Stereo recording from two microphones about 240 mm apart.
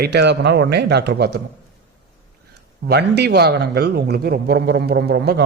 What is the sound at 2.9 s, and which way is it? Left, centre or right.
Speech, right.